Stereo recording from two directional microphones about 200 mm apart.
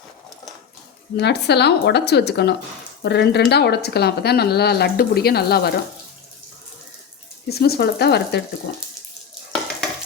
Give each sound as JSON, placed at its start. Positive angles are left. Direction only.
{"t": 1.1, "sound": "a woman's voice", "side_deg": 55}
{"t": 7.5, "sound": "speech", "side_deg": 50}